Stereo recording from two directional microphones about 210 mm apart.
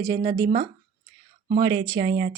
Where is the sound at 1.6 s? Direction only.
20° right (ahead or behind).